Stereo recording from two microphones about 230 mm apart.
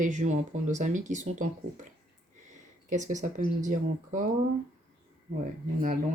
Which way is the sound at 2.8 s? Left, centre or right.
Right.